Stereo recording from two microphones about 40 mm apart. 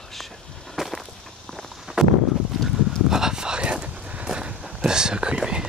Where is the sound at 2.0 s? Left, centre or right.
Centre.